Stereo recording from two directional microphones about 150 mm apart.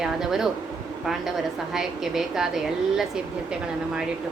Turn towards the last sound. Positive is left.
turn(degrees=-5)  # may be behind; listen again after turning